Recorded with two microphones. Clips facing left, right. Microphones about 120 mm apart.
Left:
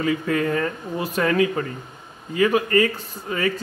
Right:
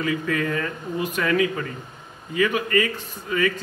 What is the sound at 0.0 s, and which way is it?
A man's voice, 30° left (ahead or behind).